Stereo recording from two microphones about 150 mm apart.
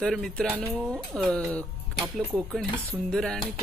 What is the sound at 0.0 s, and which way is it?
Speech, 5° left (ahead or behind).